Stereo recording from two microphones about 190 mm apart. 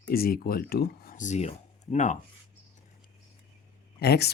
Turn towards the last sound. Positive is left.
turn(degrees=55)  # may be behind; listen again after turning